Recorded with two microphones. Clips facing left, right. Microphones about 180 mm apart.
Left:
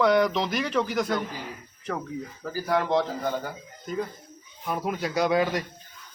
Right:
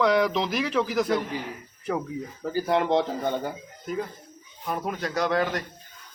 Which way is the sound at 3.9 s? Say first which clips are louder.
Even; 5° right (ahead or behind).